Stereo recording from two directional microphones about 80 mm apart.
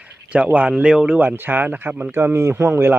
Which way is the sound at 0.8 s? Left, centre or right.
Centre.